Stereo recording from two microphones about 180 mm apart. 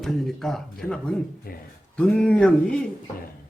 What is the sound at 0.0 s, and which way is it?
A man's voice, centre (ahead or behind).